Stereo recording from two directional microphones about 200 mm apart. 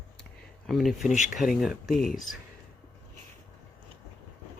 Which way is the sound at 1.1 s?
40° left (ahead or behind).